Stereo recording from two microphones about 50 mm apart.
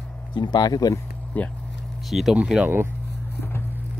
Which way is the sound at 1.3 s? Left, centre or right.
Left.